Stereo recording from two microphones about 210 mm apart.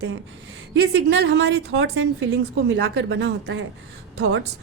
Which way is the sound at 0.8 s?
55° right (ahead or behind).